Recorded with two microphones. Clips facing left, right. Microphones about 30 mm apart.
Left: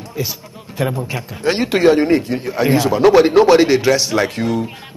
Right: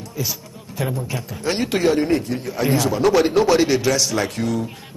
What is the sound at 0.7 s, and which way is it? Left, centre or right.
A man's voice, left.